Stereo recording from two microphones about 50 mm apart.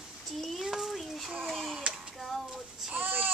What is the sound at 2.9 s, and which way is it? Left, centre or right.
Baby cry, right.